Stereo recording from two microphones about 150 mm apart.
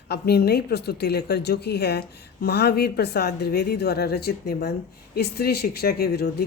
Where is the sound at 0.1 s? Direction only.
90° left.